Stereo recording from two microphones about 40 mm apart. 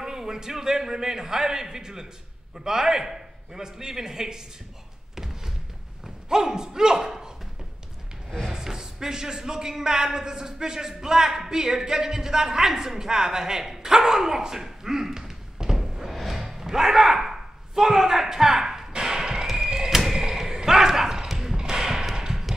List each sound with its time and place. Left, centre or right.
0.0 s a man's voice: centre
6.2 s a man's voice: centre
8.5 s a sound: centre